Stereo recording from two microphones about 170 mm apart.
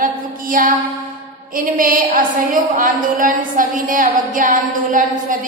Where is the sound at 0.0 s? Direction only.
55° right (ahead or behind).